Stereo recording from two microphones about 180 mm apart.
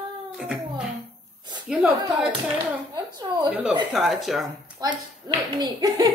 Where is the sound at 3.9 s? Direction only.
Centre (ahead or behind).